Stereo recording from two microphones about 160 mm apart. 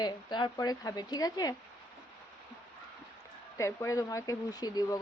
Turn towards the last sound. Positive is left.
turn(degrees=25)  # may be behind; listen again after turning